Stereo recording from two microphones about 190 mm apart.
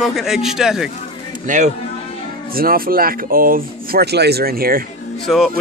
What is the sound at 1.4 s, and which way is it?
Speech, 40° right (ahead or behind).